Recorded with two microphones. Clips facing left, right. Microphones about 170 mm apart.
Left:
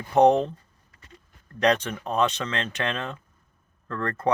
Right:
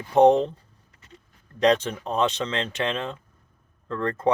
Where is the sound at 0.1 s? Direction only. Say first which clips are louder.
Right 2 dB; 20° right (ahead or behind).